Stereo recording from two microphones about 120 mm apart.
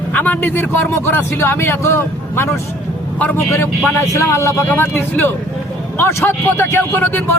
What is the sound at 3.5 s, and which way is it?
A man's voice, 25° left (ahead or behind).